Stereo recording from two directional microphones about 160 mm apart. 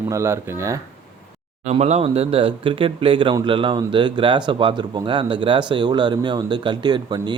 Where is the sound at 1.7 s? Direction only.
45° right (ahead or behind).